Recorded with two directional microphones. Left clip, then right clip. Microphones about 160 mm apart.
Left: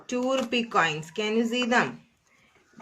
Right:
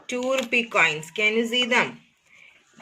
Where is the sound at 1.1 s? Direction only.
40° left (ahead or behind).